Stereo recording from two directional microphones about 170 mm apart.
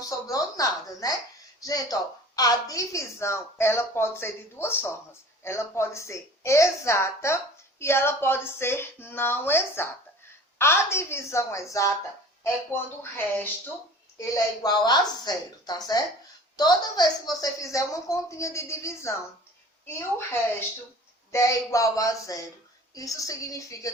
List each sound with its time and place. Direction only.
0.0 s a sound: 20° left (ahead or behind)
1.6 s a woman's voice: 20° left (ahead or behind)
21.3 s a woman's voice: 20° left (ahead or behind)